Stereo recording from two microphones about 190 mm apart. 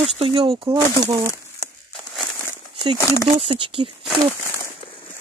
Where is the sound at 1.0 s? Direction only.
15° right (ahead or behind).